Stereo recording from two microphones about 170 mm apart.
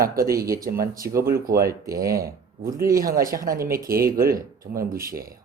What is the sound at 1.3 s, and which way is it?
Speech, 60° right (ahead or behind).